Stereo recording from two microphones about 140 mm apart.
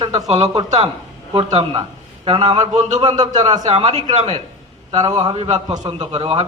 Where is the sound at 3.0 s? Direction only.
30° right (ahead or behind).